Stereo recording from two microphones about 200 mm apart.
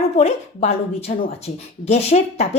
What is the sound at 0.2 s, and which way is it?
Speech, 35° left (ahead or behind).